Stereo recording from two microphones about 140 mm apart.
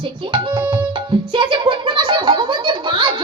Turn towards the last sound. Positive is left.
turn(degrees=-35)  # may be behind; listen again after turning